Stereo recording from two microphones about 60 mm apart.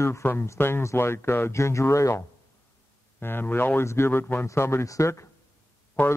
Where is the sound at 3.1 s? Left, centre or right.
Left.